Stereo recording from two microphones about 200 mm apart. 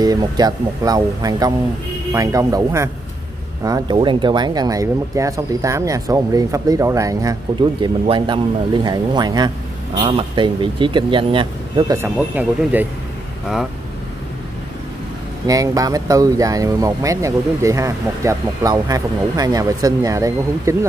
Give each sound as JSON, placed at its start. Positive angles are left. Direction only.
{"t": 0.0, "sound": "speech", "side_deg": -20}
{"t": 12.0, "sound": "speech", "side_deg": -10}
{"t": 15.4, "sound": "speech", "side_deg": -15}